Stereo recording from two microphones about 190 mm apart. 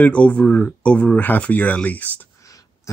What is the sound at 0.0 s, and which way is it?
Speech, 5° left (ahead or behind).